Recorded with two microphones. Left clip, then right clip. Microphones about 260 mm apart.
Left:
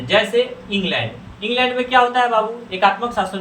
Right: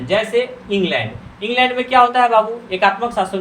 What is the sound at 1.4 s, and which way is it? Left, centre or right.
Speech, right.